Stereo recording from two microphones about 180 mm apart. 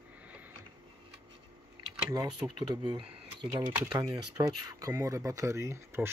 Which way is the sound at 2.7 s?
25° right (ahead or behind).